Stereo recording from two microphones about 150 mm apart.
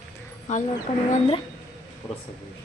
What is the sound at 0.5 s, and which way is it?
Speech, 55° left (ahead or behind).